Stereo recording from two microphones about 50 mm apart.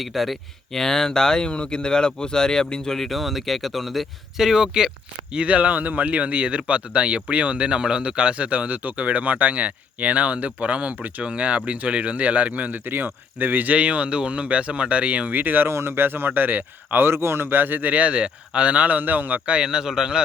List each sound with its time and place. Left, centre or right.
0.0 s speech: centre
5.3 s speech: right
15.4 s speech: right
15.7 s speech: right
17.1 s speech: right
19.5 s a man's voice: centre